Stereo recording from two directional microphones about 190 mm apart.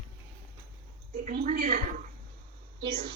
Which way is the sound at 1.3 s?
50° right (ahead or behind).